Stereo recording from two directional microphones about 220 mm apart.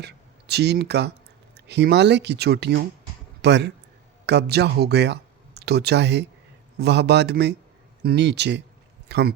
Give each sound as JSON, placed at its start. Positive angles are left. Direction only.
{"t": 0.0, "sound": "speech", "side_deg": -50}